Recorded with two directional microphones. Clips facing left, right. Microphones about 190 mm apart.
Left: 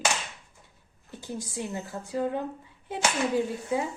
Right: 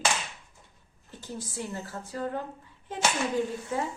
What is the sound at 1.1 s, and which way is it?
A woman's voice, 15° left (ahead or behind).